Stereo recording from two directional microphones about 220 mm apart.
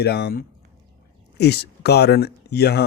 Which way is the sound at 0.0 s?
45° left (ahead or behind).